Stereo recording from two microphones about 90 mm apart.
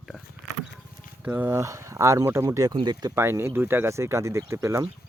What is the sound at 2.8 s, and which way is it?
Speech, 55° right (ahead or behind).